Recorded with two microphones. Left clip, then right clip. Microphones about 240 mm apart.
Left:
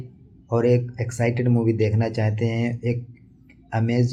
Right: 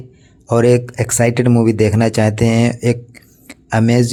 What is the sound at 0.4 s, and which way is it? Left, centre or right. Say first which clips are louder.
Speech: right 8 dB; right.